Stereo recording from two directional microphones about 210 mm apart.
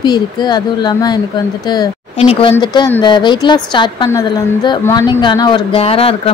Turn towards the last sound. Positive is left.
turn(degrees=25)  # may be behind; listen again after turning